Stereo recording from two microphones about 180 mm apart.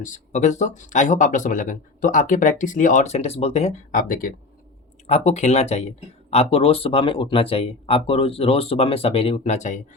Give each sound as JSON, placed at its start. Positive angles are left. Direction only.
{"t": 0.0, "sound": "speech", "side_deg": 40}
{"t": 4.1, "sound": "speech", "side_deg": 50}
{"t": 5.0, "sound": "speech", "side_deg": 35}